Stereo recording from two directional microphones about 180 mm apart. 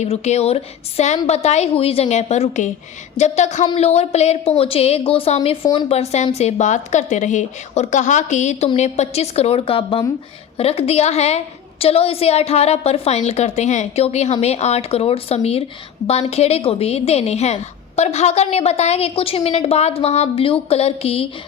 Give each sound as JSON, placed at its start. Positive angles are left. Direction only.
{"t": 0.0, "sound": "a woman's voice", "side_deg": 40}